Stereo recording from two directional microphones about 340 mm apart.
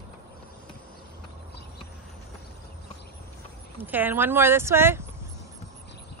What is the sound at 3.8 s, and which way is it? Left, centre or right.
Speech, centre.